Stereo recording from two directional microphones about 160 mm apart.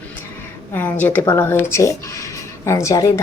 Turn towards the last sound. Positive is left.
turn(degrees=20)  # may be behind; listen again after turning